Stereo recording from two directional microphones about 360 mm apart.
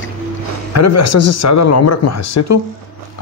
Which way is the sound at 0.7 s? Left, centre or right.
Left.